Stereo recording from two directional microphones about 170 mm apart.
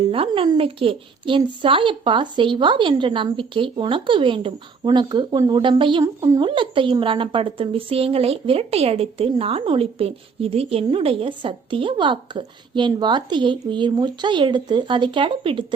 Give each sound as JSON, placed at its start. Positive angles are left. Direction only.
{"t": 0.0, "sound": "a woman's voice", "side_deg": -30}